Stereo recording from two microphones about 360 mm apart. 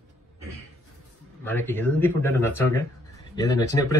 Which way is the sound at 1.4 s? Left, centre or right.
Centre.